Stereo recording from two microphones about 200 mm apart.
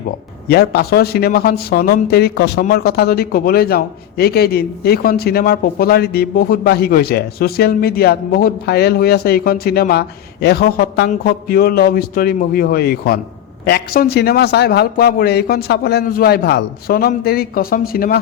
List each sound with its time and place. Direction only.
0.4 s a man's voice: 50° left (ahead or behind)